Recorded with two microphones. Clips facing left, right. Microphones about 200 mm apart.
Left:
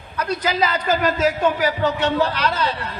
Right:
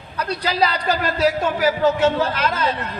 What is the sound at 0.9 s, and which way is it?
A man's voice, 40° right (ahead or behind).